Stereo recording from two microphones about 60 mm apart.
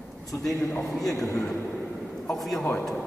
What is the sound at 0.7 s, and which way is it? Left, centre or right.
A man's voice, centre.